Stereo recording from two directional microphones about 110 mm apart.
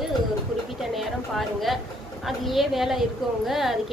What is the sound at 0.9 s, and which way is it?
A woman's voice, centre (ahead or behind).